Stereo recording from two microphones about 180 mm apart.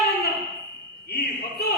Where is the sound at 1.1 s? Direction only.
60° left (ahead or behind).